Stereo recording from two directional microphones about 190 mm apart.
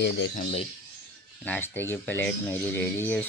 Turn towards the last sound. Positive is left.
turn(degrees=10)  # may be behind; listen again after turning